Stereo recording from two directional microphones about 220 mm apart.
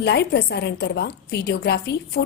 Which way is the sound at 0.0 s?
50° left (ahead or behind).